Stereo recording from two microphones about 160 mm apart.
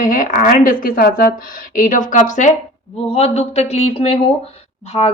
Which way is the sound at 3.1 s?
40° left (ahead or behind).